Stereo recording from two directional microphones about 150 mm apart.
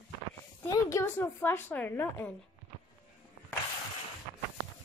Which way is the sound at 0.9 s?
15° left (ahead or behind).